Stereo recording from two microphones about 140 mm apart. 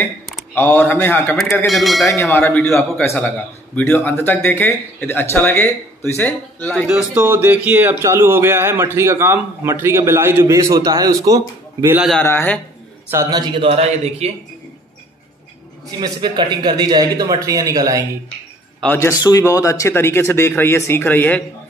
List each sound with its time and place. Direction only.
0.6 s a man's voice: 15° left (ahead or behind)
1.7 s speech: centre (ahead or behind)
2.6 s a man's voice: 20° left (ahead or behind)
7.0 s speech: 15° right (ahead or behind)
12.2 s a man's voice: 15° left (ahead or behind)
13.1 s a man's voice: 25° right (ahead or behind); by 14.3 s 45° right (ahead or behind)
16.0 s speech: 30° right (ahead or behind)
18.9 s speech: 20° left (ahead or behind)